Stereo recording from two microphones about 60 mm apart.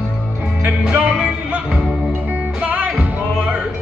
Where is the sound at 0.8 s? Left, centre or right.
Centre.